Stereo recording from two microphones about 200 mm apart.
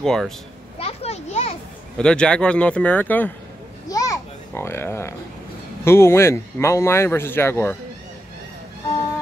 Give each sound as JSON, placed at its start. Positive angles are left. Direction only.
{"t": 0.0, "sound": "speech", "side_deg": 0}
{"t": 0.7, "sound": "children playing", "side_deg": 30}
{"t": 2.0, "sound": "speech", "side_deg": 5}
{"t": 3.9, "sound": "babbling", "side_deg": 15}
{"t": 5.9, "sound": "speech", "side_deg": 10}